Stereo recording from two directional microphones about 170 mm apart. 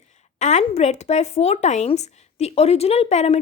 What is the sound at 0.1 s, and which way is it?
A woman's voice, 45° left (ahead or behind).